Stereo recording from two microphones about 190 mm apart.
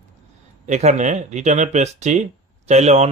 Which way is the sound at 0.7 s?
35° right (ahead or behind).